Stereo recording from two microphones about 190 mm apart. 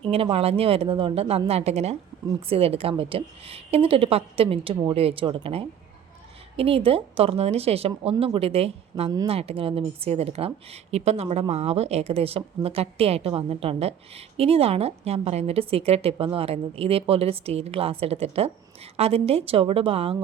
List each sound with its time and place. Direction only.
0.0 s a woman's voice: 30° right (ahead or behind)